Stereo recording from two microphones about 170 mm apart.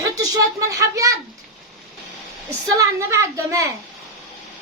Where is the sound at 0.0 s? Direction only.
20° right (ahead or behind).